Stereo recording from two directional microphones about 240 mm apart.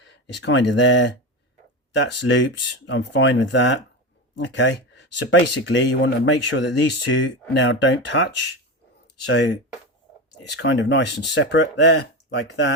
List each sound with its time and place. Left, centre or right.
0.0 s speech: left